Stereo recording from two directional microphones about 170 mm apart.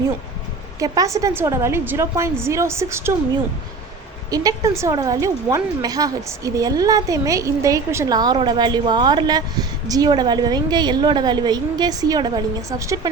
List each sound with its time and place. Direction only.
0.8 s a woman's voice: 20° right (ahead or behind)
4.3 s a woman's voice: 20° right (ahead or behind)